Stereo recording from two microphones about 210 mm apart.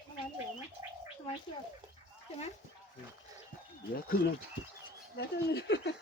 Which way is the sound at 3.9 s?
45° left (ahead or behind).